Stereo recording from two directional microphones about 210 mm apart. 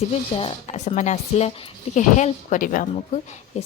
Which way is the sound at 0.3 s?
25° left (ahead or behind).